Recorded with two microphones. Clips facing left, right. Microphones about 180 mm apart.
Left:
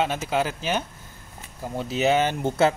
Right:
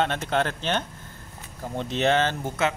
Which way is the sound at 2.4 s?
30° left (ahead or behind).